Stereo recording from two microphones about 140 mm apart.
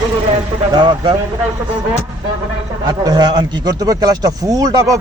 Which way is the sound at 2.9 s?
30° right (ahead or behind).